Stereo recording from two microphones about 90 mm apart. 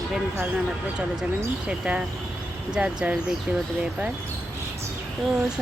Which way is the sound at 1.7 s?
10° right (ahead or behind).